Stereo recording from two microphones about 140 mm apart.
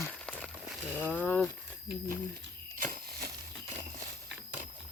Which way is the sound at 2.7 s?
80° right.